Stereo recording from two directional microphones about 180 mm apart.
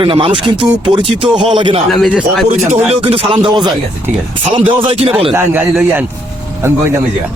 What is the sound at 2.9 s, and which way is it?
Speech, 30° right (ahead or behind).